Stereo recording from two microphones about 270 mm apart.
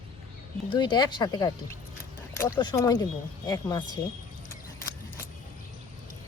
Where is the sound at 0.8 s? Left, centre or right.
Centre.